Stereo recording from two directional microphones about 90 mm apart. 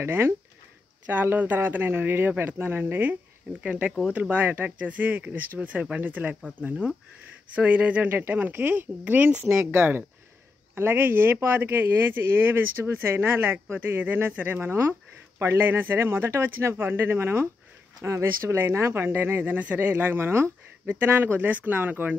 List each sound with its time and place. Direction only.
0.0 s speech: 25° right (ahead or behind)